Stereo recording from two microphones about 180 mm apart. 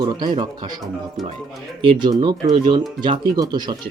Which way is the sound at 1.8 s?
25° right (ahead or behind).